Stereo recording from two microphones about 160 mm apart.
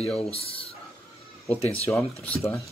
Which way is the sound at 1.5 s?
10° left (ahead or behind).